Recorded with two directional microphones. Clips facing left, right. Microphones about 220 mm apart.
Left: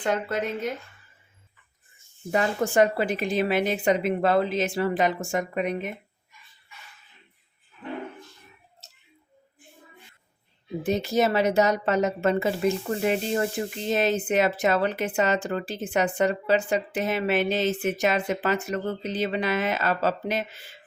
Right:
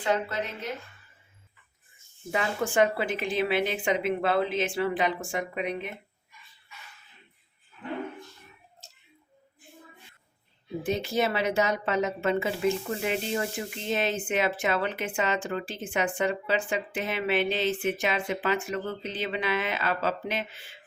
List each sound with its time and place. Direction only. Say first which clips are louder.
0.0 s a woman's voice: left 2 dB; 50° left (ahead or behind)
2.3 s a woman's voice: left 4 dB; 40° left (ahead or behind)
10.8 s a woman's voice: left 4 dB; 40° left (ahead or behind)